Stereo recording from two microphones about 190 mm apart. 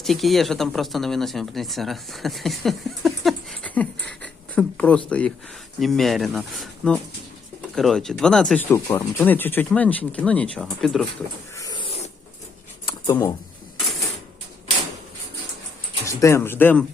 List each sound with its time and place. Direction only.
0.0 s speech: centre (ahead or behind)
11.5 s a sound: 20° left (ahead or behind)
16.0 s speech: 15° left (ahead or behind)